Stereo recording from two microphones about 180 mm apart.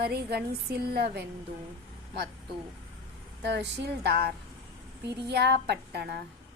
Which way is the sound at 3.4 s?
70° right (ahead or behind).